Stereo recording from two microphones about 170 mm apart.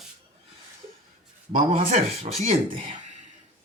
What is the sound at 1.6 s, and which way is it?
Speech, 35° right (ahead or behind).